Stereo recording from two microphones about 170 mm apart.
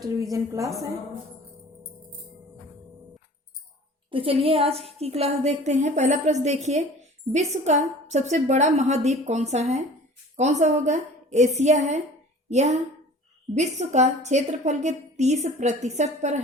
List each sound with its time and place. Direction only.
0.0 s a woman's voice: 20° right (ahead or behind)
4.1 s a woman's voice: 35° right (ahead or behind)